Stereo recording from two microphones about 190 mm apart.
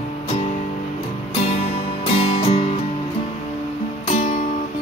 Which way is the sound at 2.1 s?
35° left (ahead or behind).